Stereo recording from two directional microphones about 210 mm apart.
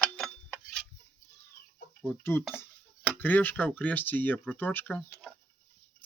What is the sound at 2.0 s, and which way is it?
Speech, 10° left (ahead or behind).